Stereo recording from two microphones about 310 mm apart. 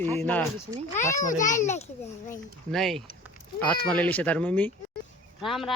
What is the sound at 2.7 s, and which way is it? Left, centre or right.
Speech, centre.